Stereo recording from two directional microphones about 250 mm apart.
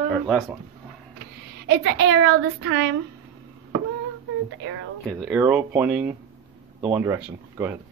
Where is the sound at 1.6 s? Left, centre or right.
Right.